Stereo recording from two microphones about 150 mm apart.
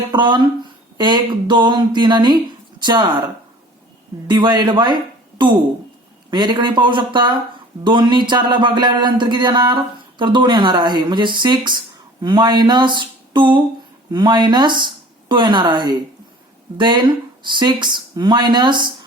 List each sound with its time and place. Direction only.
0.1 s speech: 30° right (ahead or behind)
4.3 s a man's voice: 30° right (ahead or behind)
6.3 s speech: 30° right (ahead or behind)